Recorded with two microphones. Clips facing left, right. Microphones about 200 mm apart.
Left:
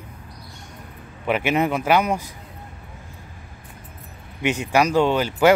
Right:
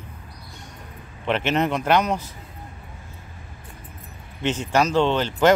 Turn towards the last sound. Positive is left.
turn(degrees=10)  # may be behind; listen again after turning